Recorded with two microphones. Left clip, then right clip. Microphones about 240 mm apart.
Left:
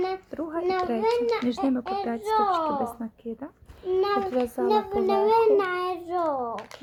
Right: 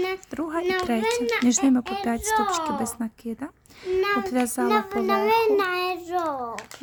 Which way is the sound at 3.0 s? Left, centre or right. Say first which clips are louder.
Right 3 dB; right.